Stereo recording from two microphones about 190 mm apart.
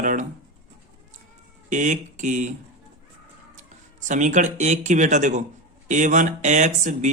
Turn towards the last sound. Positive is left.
turn(degrees=-40)  # may be behind; listen again after turning